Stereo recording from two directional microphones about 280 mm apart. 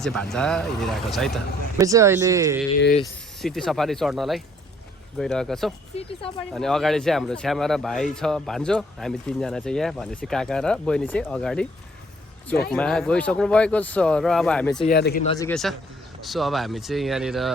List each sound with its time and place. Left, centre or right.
0.0 s speech: centre
1.8 s speech: centre
2.9 s speech: centre
12.7 s speech: centre
14.8 s speech: left
15.2 s speech: centre
15.4 s speech: centre